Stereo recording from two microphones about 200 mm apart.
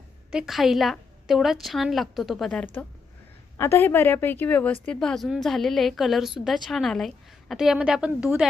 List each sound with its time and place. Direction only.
0.3 s a woman's voice: centre (ahead or behind)